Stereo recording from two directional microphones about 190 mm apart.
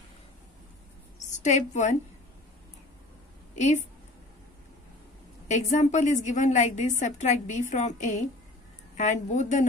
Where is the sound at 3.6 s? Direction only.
40° left (ahead or behind).